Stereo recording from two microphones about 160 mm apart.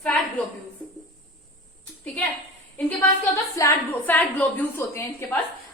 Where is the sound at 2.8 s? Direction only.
10° left (ahead or behind).